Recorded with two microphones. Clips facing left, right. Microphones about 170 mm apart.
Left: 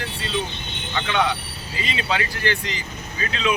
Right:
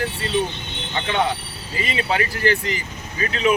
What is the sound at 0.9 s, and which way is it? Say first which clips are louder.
Speech: right 1 dB; 35° right (ahead or behind).